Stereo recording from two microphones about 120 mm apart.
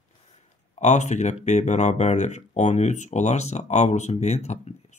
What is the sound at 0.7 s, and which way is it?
Speech, 75° left (ahead or behind).